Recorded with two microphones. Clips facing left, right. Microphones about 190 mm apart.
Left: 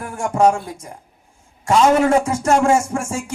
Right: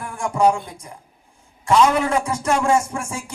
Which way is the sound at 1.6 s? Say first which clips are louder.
Left 3 dB; 45° left (ahead or behind).